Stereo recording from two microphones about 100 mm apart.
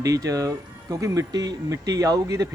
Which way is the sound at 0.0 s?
35° right (ahead or behind).